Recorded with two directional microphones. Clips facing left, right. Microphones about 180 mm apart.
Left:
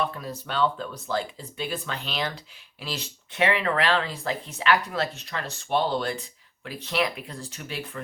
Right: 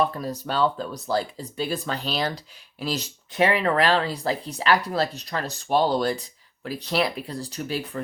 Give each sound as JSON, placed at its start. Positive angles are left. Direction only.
{"t": 0.0, "sound": "speech", "side_deg": -40}